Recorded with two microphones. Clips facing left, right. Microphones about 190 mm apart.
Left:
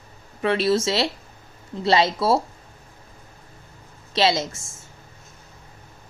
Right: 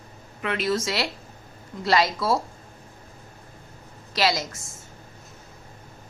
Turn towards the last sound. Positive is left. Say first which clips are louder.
# left 3 dB
turn(degrees=25)  # may be behind; listen again after turning